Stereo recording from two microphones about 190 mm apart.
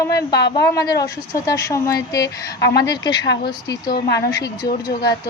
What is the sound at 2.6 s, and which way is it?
Speech, 65° left (ahead or behind).